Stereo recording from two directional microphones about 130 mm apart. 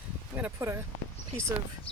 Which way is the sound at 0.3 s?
15° right (ahead or behind).